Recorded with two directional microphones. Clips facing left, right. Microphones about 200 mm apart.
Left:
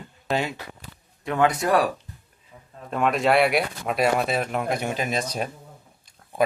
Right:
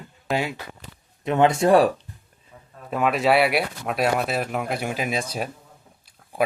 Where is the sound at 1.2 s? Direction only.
25° right (ahead or behind).